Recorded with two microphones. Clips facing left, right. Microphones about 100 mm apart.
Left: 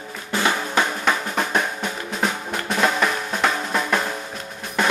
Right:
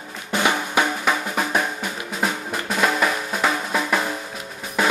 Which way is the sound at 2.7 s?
Centre (ahead or behind).